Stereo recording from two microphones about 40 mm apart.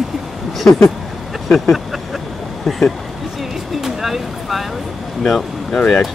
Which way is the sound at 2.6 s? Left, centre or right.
Centre.